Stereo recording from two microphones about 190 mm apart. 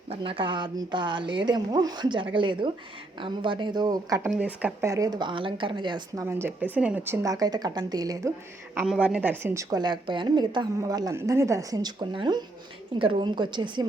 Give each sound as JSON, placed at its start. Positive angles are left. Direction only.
{"t": 0.1, "sound": "a woman's voice", "side_deg": -30}
{"t": 4.4, "sound": "a woman's voice", "side_deg": -10}
{"t": 6.2, "sound": "speech", "side_deg": -10}
{"t": 8.7, "sound": "a woman's voice", "side_deg": -5}